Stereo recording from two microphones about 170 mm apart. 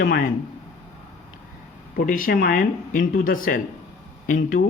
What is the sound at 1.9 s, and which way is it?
Speech, 55° left (ahead or behind).